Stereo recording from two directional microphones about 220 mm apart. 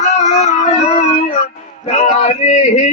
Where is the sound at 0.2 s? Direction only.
30° left (ahead or behind).